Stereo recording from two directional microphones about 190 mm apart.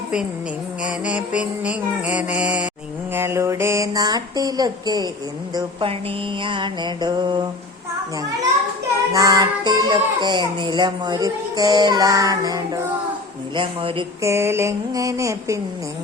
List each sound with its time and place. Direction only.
0.8 s mantra: 5° right (ahead or behind)
5.5 s speech: 30° right (ahead or behind)
9.1 s speech: 20° right (ahead or behind)
14.2 s mantra: 15° right (ahead or behind)